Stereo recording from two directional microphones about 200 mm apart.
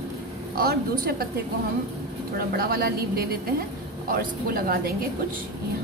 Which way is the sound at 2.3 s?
50° right (ahead or behind).